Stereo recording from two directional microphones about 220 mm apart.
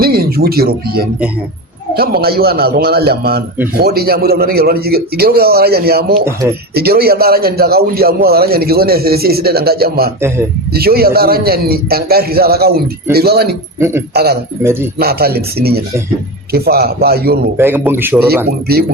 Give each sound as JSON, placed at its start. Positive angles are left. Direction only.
{"t": 0.0, "sound": "speech", "side_deg": -45}
{"t": 2.2, "sound": "a man's voice", "side_deg": -45}
{"t": 10.2, "sound": "a man's voice", "side_deg": -10}
{"t": 10.7, "sound": "a man's voice", "side_deg": -45}
{"t": 13.7, "sound": "a man's voice", "side_deg": -10}
{"t": 14.1, "sound": "a man's voice", "side_deg": -45}
{"t": 14.6, "sound": "a man's voice", "side_deg": -10}
{"t": 14.9, "sound": "a man's voice", "side_deg": -45}
{"t": 17.6, "sound": "a man's voice", "side_deg": -10}